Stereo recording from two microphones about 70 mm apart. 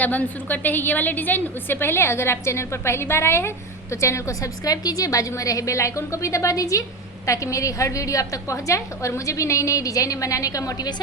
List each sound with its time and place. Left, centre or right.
0.0 s a woman's voice: left
4.6 s a woman's voice: left